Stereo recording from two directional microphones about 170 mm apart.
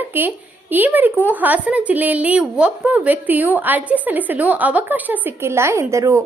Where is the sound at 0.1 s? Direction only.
10° right (ahead or behind).